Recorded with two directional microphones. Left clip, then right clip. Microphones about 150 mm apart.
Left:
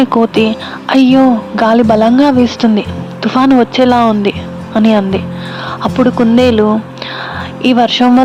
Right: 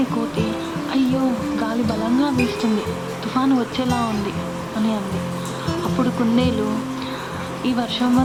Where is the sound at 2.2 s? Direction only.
85° left.